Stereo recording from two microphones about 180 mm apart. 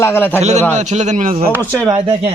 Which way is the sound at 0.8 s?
40° right (ahead or behind).